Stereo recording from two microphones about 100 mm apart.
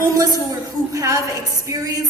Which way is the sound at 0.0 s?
35° right (ahead or behind).